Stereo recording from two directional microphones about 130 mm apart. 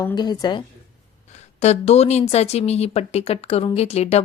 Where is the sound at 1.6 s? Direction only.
55° left (ahead or behind).